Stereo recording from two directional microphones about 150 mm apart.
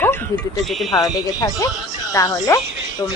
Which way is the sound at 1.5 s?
20° left (ahead or behind).